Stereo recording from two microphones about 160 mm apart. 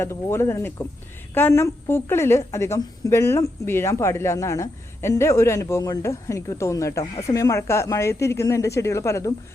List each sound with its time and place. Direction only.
0.0 s a woman's voice: 15° left (ahead or behind)